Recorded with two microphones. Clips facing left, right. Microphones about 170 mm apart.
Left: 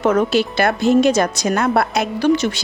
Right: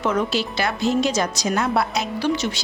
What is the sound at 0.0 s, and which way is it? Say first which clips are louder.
A woman's voice: left 6 dB; 50° left (ahead or behind).